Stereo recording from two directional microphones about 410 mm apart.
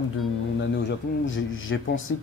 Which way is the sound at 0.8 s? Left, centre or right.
Left.